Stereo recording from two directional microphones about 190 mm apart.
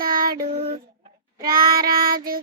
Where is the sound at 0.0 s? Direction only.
50° right (ahead or behind).